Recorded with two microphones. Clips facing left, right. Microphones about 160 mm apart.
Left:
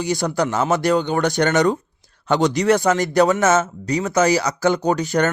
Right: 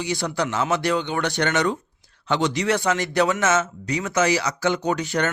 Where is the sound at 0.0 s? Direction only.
45° left (ahead or behind).